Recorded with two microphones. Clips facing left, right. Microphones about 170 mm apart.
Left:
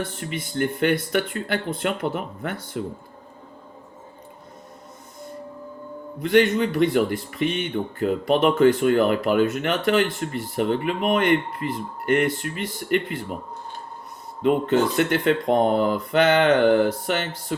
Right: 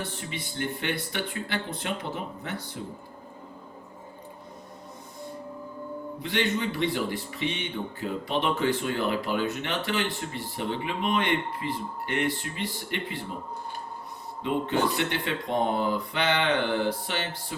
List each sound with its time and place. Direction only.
0.2 s speech: 50° left (ahead or behind)
6.2 s speech: 50° left (ahead or behind)
14.9 s speech: 50° left (ahead or behind)